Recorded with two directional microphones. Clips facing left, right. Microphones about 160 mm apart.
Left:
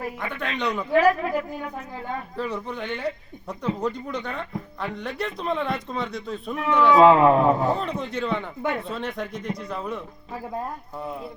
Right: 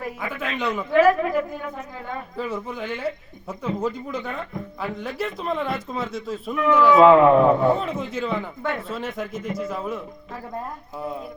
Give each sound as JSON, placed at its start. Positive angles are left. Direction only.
{"t": 0.2, "sound": "speech", "side_deg": -5}
{"t": 0.9, "sound": "a woman's voice", "side_deg": 35}
{"t": 2.3, "sound": "speech", "side_deg": 0}
{"t": 7.0, "sound": "a woman's voice", "side_deg": 35}
{"t": 7.8, "sound": "speech", "side_deg": 0}